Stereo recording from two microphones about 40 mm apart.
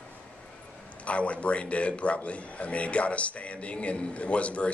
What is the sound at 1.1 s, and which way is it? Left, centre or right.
A man's voice, left.